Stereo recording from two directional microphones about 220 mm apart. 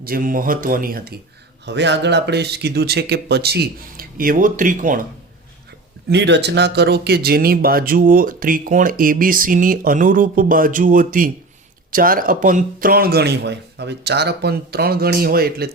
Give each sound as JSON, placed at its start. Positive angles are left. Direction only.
{"t": 0.0, "sound": "speech", "side_deg": -40}
{"t": 6.1, "sound": "speech", "side_deg": -50}